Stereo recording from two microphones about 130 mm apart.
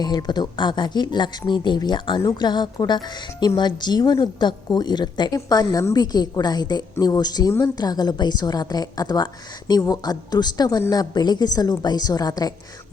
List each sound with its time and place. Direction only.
0.0 s a woman's voice: 30° left (ahead or behind)